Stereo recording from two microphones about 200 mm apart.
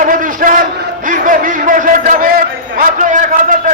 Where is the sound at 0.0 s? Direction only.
45° right (ahead or behind).